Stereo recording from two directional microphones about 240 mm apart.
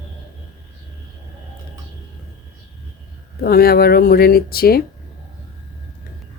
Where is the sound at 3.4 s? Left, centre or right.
Left.